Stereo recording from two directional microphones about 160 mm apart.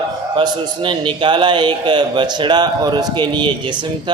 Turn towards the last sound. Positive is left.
turn(degrees=-30)  # may be behind; listen again after turning